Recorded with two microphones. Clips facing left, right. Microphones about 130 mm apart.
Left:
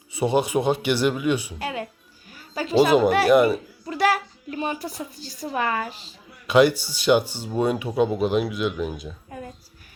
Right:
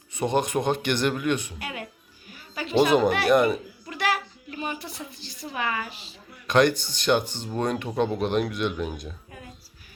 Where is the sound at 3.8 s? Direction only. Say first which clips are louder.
Left 7 dB; 35° left (ahead or behind).